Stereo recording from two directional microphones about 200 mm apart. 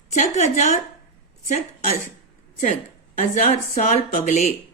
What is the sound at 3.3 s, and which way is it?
Speech, 40° left (ahead or behind).